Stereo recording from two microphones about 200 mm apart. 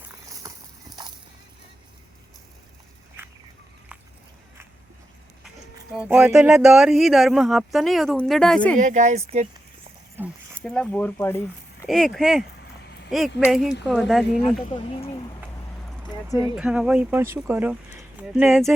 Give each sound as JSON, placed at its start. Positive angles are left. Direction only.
{"t": 0.3, "sound": "horse", "side_deg": -20}
{"t": 5.9, "sound": "speech", "side_deg": -5}
{"t": 8.8, "sound": "speech", "side_deg": -35}
{"t": 10.6, "sound": "speech", "side_deg": 5}
{"t": 11.9, "sound": "speech", "side_deg": 0}
{"t": 12.8, "sound": "a sound", "side_deg": 55}
{"t": 13.1, "sound": "speech", "side_deg": 0}
{"t": 14.4, "sound": "speech", "side_deg": 30}
{"t": 16.6, "sound": "speech", "side_deg": -5}